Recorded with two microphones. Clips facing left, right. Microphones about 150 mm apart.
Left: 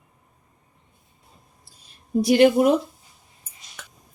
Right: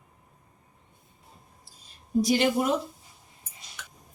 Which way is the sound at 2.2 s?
60° left (ahead or behind).